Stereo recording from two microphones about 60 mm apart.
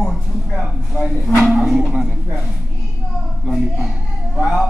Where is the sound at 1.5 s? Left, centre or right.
Centre.